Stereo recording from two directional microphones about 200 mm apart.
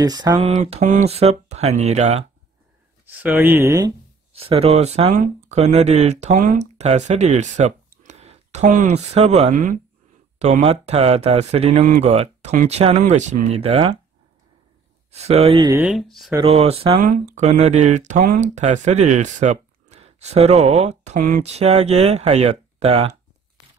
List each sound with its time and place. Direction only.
0.0 s speech: 20° right (ahead or behind)
3.1 s speech: 10° right (ahead or behind)
4.3 s speech: 30° right (ahead or behind)
15.0 s speech: 30° right (ahead or behind)
15.6 s speech: 15° right (ahead or behind)
15.9 s speech: centre (ahead or behind)
16.4 s speech: 30° right (ahead or behind)
17.0 s speech: 45° right (ahead or behind)